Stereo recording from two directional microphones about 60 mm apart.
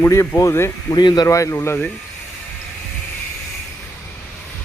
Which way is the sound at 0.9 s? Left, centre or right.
Left.